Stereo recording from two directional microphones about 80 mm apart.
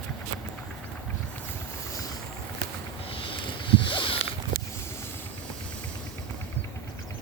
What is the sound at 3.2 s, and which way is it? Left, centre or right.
Vehicle, left.